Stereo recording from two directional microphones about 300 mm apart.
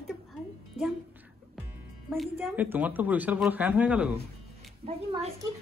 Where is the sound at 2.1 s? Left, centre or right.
Centre.